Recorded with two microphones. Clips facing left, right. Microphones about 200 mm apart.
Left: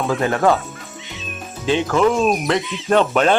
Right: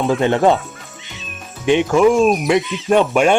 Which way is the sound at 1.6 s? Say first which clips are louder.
Right 4 dB; 15° right (ahead or behind).